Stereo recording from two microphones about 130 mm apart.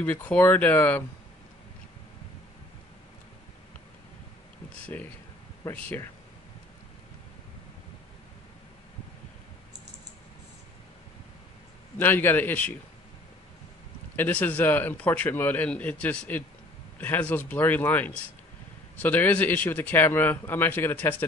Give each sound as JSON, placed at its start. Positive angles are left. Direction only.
{"t": 0.0, "sound": "a man's voice", "side_deg": 10}
{"t": 4.9, "sound": "a man's voice", "side_deg": 15}
{"t": 12.0, "sound": "a man's voice", "side_deg": 15}
{"t": 14.1, "sound": "a man's voice", "side_deg": 15}